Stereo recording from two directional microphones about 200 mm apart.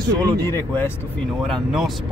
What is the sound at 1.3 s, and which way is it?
Speech, centre (ahead or behind).